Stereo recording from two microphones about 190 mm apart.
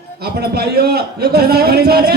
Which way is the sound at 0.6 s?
55° right (ahead or behind).